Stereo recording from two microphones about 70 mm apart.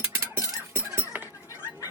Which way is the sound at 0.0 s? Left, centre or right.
Right.